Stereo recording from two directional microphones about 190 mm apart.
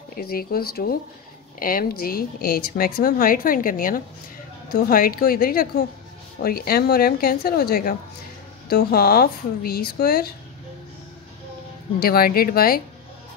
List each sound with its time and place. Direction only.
0.1 s speech: 50° left (ahead or behind)
12.0 s speech: 50° left (ahead or behind)